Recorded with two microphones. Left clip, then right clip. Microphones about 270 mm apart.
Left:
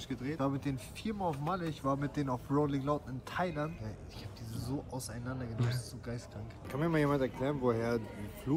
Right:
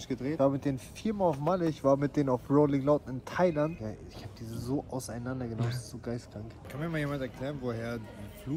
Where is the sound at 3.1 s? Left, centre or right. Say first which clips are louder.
Right 8 dB; right.